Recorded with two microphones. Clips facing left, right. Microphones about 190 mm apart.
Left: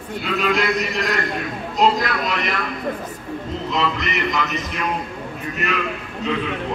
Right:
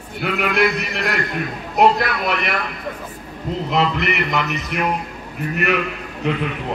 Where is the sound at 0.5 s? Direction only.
60° right (ahead or behind).